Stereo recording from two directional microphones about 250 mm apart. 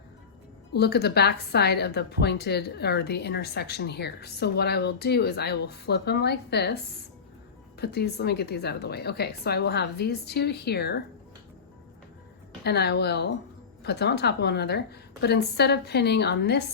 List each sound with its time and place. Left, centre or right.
0.7 s a woman's voice: left
12.6 s a woman's voice: left